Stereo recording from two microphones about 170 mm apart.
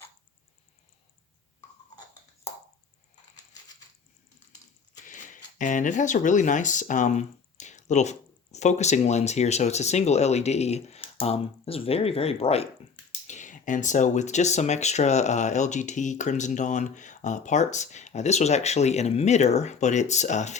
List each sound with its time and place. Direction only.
5.0 s speech: 50° left (ahead or behind)
13.2 s speech: 45° left (ahead or behind)